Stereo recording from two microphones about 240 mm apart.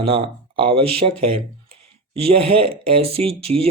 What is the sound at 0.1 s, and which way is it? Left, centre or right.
Speech, right.